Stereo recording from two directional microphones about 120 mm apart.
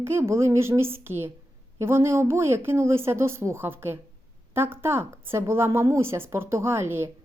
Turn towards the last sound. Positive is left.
turn(degrees=-20)  # may be behind; listen again after turning